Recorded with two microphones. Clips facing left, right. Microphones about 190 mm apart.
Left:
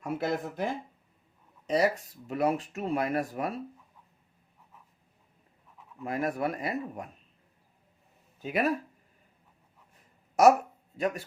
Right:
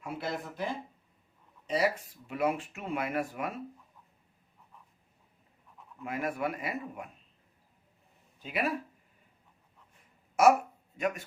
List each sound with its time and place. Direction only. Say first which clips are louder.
0.0 s speech: left 6 dB; 45° left (ahead or behind)
6.0 s speech: left 3 dB; 40° left (ahead or behind)
8.4 s speech: left 4 dB; 45° left (ahead or behind)
10.9 s speech: left 2 dB; 35° left (ahead or behind)